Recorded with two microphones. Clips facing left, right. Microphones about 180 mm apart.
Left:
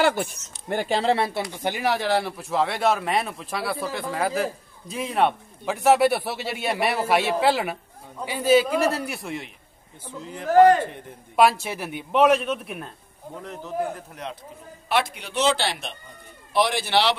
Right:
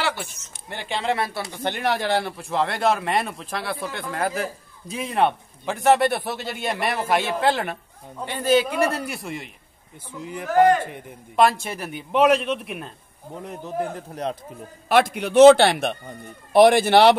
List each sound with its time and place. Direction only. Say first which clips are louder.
0.0 s speech: left 6 dB; 50° left (ahead or behind); by 1.4 s 25° left (ahead or behind)
1.5 s speech: even; 10° left (ahead or behind)
10.2 s a man's voice: left 2 dB; 15° right (ahead or behind)
11.3 s speech: even; 5° left (ahead or behind)
13.4 s a man's voice: right 2 dB; 15° right (ahead or behind)
14.9 s a man's voice: right 6 dB; 45° right (ahead or behind)